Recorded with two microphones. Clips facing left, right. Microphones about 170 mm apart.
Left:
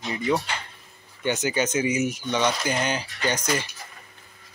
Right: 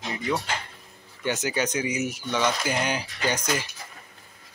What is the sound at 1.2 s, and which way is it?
Speech, centre (ahead or behind).